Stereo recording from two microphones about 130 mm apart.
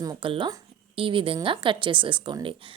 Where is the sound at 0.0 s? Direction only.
35° right (ahead or behind).